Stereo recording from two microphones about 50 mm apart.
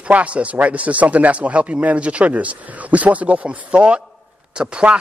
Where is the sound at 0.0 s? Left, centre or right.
Right.